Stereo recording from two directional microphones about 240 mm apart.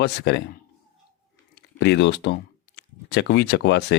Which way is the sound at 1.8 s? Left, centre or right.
Left.